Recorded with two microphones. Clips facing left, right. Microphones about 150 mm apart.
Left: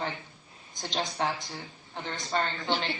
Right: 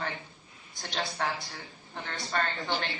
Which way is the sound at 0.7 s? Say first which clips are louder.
Left 2 dB; 20° left (ahead or behind).